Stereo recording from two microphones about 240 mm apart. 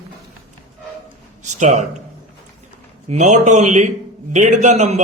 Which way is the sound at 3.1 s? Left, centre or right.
Right.